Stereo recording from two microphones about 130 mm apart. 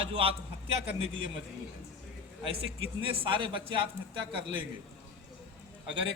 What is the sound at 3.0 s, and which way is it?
Speech, 40° right (ahead or behind).